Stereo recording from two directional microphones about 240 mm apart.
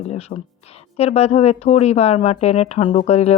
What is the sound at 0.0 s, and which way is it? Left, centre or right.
Speech, left.